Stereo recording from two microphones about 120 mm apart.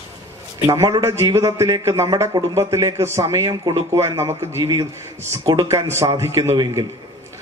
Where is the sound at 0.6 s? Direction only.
25° right (ahead or behind).